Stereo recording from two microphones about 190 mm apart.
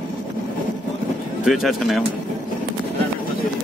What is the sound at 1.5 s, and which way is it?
Speech, centre (ahead or behind).